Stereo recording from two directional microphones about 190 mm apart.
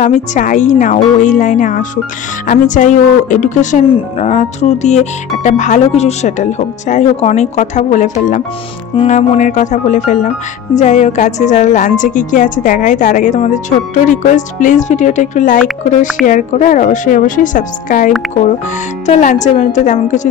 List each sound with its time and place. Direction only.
0.0 s a woman's voice: 40° left (ahead or behind)